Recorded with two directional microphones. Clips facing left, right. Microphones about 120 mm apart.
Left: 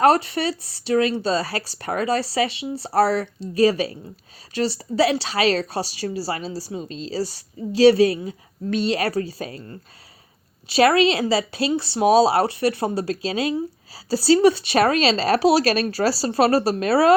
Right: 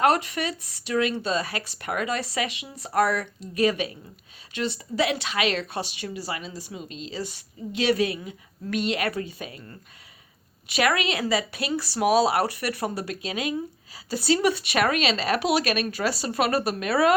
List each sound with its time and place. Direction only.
0.0 s speech: 35° left (ahead or behind)
10.7 s speech: 30° left (ahead or behind)